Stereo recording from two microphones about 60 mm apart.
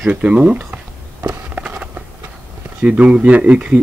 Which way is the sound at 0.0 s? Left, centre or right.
Right.